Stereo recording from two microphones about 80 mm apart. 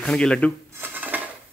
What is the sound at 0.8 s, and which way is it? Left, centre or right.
Dishes, right.